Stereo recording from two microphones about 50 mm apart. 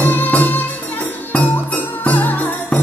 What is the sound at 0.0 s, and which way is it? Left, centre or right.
Music, left.